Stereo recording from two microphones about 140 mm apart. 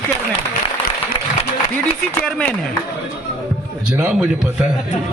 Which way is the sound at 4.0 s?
10° right (ahead or behind).